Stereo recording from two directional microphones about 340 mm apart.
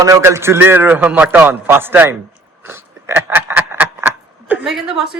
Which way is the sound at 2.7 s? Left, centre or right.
Centre.